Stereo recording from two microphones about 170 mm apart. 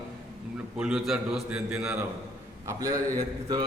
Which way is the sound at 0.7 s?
5° right (ahead or behind).